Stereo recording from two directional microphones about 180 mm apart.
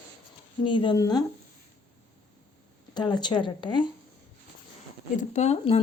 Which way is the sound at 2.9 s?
25° left (ahead or behind).